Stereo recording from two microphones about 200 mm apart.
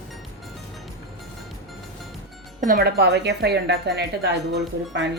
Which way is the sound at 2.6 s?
50° right (ahead or behind).